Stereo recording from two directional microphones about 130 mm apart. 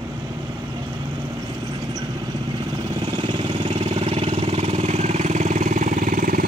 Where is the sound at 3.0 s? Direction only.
45° right (ahead or behind).